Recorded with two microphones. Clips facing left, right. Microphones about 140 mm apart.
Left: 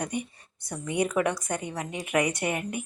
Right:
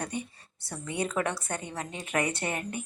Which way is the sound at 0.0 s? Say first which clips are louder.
Left 3 dB; 15° left (ahead or behind).